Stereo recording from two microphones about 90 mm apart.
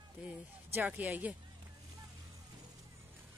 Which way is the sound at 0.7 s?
20° right (ahead or behind).